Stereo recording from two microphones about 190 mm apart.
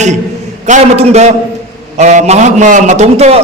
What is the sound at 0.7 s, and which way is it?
A man's voice, 35° right (ahead or behind).